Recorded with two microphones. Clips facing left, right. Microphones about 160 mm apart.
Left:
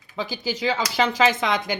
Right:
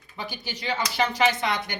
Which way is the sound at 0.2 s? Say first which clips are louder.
Left 8 dB; 90° left.